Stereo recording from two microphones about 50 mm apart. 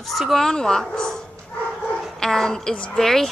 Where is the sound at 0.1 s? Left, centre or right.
Centre.